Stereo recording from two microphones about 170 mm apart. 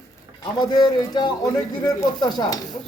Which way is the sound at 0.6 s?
25° left (ahead or behind).